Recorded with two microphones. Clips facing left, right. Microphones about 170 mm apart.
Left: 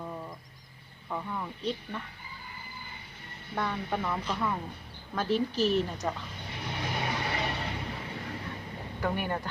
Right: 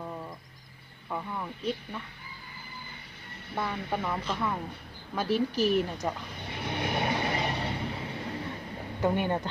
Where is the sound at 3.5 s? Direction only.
5° right (ahead or behind).